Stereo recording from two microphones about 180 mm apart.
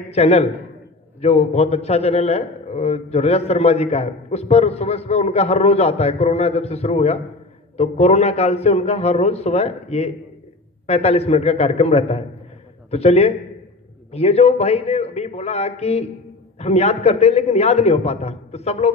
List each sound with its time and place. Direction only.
0.1 s a man's voice: 35° left (ahead or behind)